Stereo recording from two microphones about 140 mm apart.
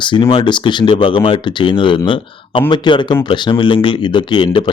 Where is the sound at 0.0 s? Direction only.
35° left (ahead or behind).